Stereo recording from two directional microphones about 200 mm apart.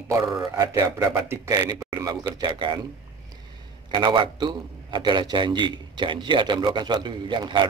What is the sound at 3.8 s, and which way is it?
A man's voice, 25° right (ahead or behind).